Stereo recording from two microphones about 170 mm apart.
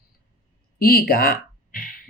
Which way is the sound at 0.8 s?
60° left (ahead or behind).